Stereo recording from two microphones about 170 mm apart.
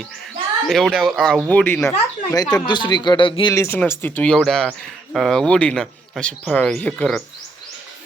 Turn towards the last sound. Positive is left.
turn(degrees=5)  # may be behind; listen again after turning